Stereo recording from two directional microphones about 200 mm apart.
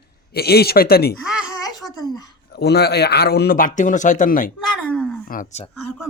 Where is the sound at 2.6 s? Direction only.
55° left (ahead or behind).